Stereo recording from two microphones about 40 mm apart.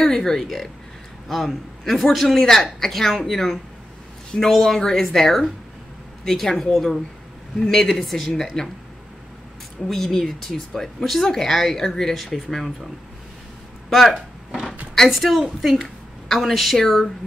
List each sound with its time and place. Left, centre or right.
0.0 s a woman's voice: centre
8.0 s a woman's voice: centre
8.6 s a woman's voice: centre
9.8 s a woman's voice: centre
13.8 s a sound: centre
15.0 s a woman's voice: centre